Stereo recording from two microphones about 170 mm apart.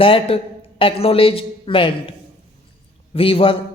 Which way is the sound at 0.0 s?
30° left (ahead or behind).